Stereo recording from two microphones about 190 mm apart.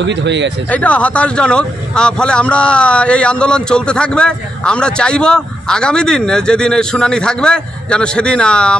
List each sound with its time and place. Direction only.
0.0 s speech: 65° right (ahead or behind)
0.7 s speech: 5° left (ahead or behind)